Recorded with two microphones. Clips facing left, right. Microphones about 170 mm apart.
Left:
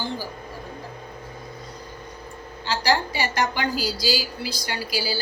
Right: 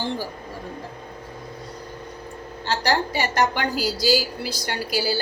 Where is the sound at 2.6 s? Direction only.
55° right (ahead or behind).